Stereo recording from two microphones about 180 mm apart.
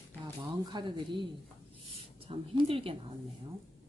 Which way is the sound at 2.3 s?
30° right (ahead or behind).